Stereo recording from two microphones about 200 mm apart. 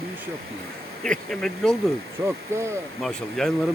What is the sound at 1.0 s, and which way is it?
Speech, 5° left (ahead or behind).